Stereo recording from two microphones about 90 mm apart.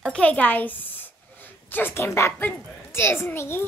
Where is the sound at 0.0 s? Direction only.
10° left (ahead or behind).